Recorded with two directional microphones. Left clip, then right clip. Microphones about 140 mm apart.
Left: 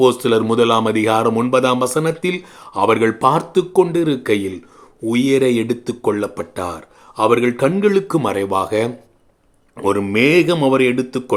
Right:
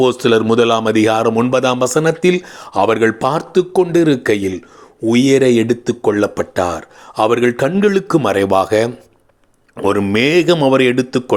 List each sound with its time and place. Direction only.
0.0 s speech: 25° right (ahead or behind); by 8.9 s 40° right (ahead or behind)
9.8 s speech: 25° right (ahead or behind)